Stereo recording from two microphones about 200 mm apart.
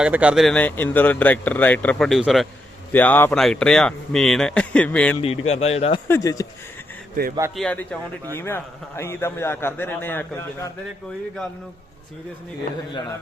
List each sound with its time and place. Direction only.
0.0 s a man's voice: 5° right (ahead or behind)
5.2 s speech: 30° left (ahead or behind)
6.1 s a man's voice: 15° left (ahead or behind)
7.5 s a man's voice: 5° left (ahead or behind)